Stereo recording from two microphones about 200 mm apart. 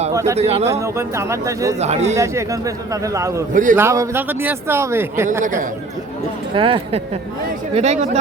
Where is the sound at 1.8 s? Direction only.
35° right (ahead or behind).